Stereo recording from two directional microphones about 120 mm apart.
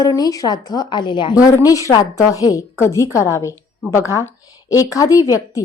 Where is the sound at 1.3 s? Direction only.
30° left (ahead or behind).